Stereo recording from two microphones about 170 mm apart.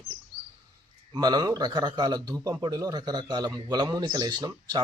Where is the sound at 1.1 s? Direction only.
25° right (ahead or behind).